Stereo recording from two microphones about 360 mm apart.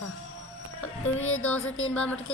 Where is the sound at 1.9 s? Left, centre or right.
Centre.